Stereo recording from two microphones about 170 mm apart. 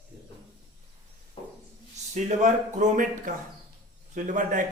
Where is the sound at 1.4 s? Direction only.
35° left (ahead or behind).